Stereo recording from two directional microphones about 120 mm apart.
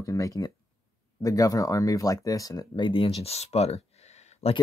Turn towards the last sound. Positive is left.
turn(degrees=65)  # may be behind; listen again after turning